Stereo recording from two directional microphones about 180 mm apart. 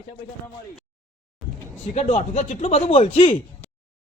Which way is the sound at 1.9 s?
40° left (ahead or behind).